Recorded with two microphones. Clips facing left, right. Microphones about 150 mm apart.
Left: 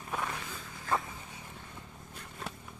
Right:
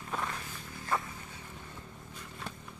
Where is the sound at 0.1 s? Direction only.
10° left (ahead or behind).